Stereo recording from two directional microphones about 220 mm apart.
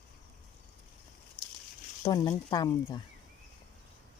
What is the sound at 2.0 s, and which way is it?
Speech, 15° left (ahead or behind).